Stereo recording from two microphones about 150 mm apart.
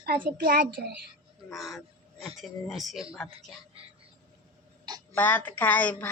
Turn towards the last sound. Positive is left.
turn(degrees=10)  # may be behind; listen again after turning